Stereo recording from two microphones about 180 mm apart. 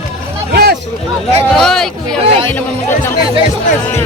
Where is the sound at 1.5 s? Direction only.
Centre (ahead or behind).